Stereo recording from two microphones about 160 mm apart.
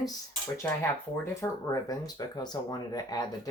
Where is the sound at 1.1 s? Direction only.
15° left (ahead or behind).